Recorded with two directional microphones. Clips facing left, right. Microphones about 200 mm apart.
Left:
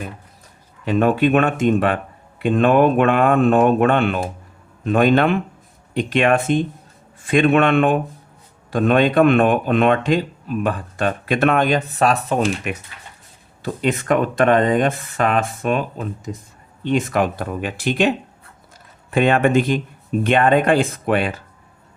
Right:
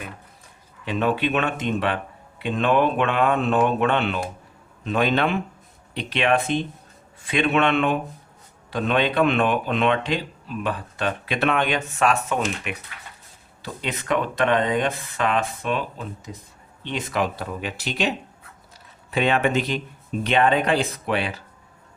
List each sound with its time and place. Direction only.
0.9 s speech: 45° left (ahead or behind)
13.6 s speech: 50° left (ahead or behind)
19.1 s speech: 50° left (ahead or behind)